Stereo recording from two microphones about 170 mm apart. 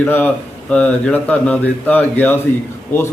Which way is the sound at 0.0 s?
10° left (ahead or behind).